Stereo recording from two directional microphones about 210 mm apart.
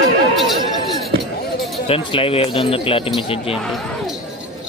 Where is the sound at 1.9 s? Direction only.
25° left (ahead or behind).